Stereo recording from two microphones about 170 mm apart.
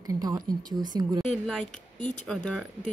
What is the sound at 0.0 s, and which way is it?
Speech, 20° right (ahead or behind).